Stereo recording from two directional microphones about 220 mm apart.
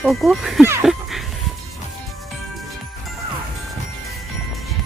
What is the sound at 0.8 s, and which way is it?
Music, centre (ahead or behind).